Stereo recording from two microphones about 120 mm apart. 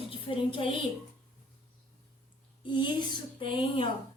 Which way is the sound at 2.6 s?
40° left (ahead or behind).